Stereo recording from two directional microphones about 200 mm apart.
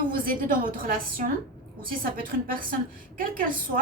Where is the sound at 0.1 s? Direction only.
45° right (ahead or behind).